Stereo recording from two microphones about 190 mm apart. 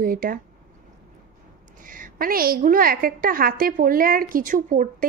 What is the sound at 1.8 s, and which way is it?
A woman's voice, 45° right (ahead or behind).